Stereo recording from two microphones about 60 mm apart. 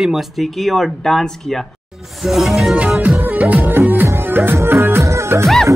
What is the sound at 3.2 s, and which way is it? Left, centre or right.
Music, right.